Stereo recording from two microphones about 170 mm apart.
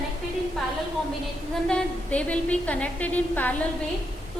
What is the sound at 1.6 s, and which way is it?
A woman's voice, 5° left (ahead or behind).